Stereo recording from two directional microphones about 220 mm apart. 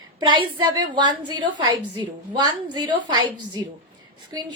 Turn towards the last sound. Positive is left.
turn(degrees=-20)  # may be behind; listen again after turning